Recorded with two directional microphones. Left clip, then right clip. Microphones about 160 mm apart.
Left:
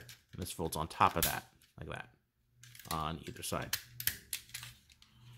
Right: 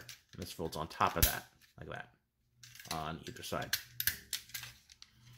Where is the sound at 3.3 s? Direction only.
15° left (ahead or behind).